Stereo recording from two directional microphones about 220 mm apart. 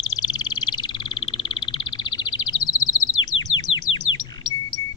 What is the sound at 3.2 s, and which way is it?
Bird, 15° left (ahead or behind).